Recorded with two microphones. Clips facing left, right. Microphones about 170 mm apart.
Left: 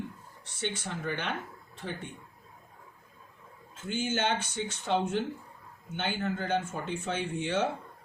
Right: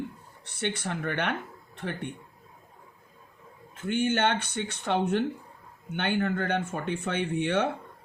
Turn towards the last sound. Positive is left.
turn(degrees=-60)  # may be behind; listen again after turning